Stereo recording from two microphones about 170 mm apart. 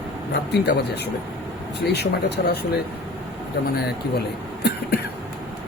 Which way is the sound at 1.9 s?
75° left (ahead or behind).